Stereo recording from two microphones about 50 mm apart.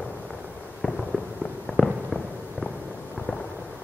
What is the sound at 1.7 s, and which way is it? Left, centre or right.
Fireworks, right.